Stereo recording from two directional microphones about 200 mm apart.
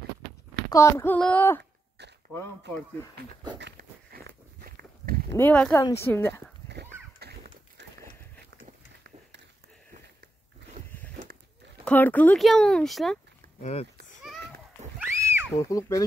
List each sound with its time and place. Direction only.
0.7 s speech: 15° left (ahead or behind)
3.5 s walk: 55° right (ahead or behind)
5.3 s speech: 10° left (ahead or behind)
7.2 s a sound: 55° right (ahead or behind)
10.6 s biting: 60° right (ahead or behind)
11.8 s speech: 10° left (ahead or behind)
13.6 s speech: 35° left (ahead or behind)
15.0 s a sound: 10° right (ahead or behind)
15.5 s speech: 15° left (ahead or behind)